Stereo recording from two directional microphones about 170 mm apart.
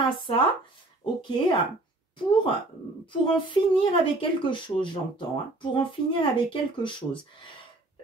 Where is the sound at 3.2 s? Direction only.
30° left (ahead or behind).